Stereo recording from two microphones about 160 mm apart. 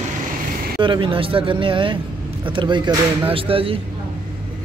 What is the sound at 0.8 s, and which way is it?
Speech, 30° right (ahead or behind).